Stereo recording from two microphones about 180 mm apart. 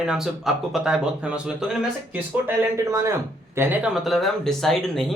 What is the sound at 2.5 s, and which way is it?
A man's voice, 15° right (ahead or behind).